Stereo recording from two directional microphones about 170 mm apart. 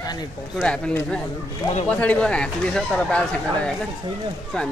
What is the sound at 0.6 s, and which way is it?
Speech, 5° left (ahead or behind).